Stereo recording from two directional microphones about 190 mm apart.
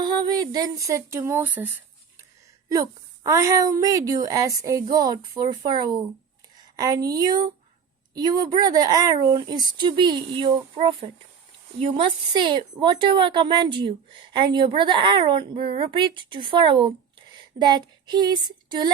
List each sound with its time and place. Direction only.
0.0 s a woman's voice: 20° right (ahead or behind)